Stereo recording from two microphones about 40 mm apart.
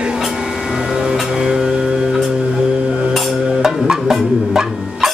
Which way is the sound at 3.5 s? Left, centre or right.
Centre.